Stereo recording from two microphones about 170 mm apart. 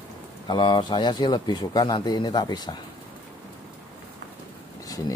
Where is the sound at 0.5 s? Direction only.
25° left (ahead or behind).